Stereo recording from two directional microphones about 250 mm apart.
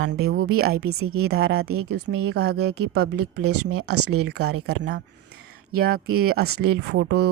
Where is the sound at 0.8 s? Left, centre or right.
Right.